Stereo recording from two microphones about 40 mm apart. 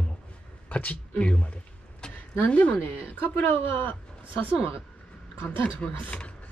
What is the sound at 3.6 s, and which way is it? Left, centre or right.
Speech, left.